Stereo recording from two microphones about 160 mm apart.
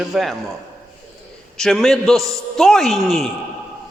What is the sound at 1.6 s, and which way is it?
A man's voice, 5° left (ahead or behind).